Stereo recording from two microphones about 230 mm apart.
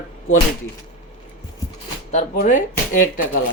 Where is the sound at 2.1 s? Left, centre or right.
Left.